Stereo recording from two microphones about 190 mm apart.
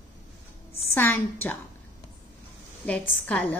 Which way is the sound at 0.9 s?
10° left (ahead or behind).